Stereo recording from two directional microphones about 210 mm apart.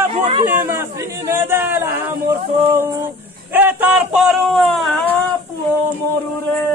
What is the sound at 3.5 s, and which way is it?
Speech, 10° right (ahead or behind).